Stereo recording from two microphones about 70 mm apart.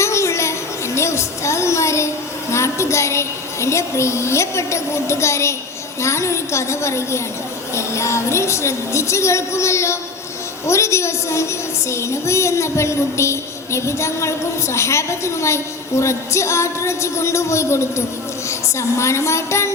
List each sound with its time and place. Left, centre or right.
0.0 s a sound: left
0.9 s music: left
2.5 s a woman's voice: left